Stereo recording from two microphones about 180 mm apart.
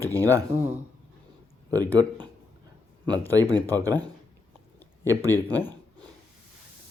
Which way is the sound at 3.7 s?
20° right (ahead or behind).